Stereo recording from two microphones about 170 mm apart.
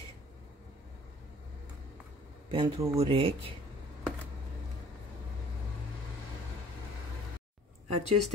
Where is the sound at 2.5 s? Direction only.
30° right (ahead or behind).